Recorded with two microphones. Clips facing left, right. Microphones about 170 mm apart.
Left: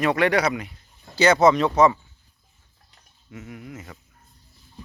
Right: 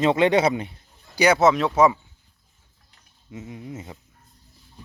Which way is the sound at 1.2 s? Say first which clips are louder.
Left 1 dB; 5° right (ahead or behind).